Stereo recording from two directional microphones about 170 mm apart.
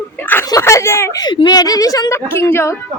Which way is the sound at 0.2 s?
10° left (ahead or behind).